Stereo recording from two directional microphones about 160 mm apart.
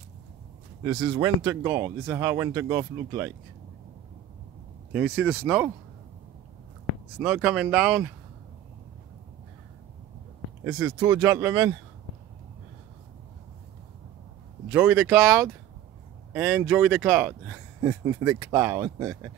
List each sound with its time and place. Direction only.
1.2 s speech: 15° right (ahead or behind)
4.9 s speech: 10° right (ahead or behind)
7.2 s speech: 5° right (ahead or behind)
10.6 s speech: 5° right (ahead or behind)
11.0 s speech: 20° right (ahead or behind)
14.7 s speech: 10° right (ahead or behind)
16.3 s speech: 10° right (ahead or behind)